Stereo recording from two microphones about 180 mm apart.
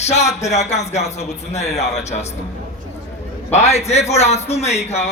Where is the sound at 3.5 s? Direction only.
40° left (ahead or behind).